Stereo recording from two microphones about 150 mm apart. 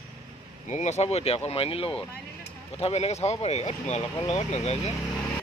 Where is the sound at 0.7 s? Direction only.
50° left (ahead or behind).